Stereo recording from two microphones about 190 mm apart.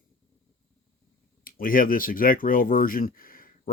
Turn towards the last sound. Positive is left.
turn(degrees=50)  # may be behind; listen again after turning